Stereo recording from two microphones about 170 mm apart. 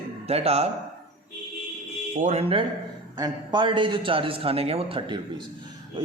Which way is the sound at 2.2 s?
40° right (ahead or behind).